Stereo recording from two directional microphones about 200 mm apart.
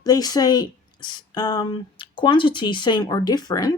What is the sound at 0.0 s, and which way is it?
Speech, 20° left (ahead or behind).